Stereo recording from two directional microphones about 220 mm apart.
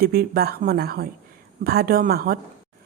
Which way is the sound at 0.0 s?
45° right (ahead or behind).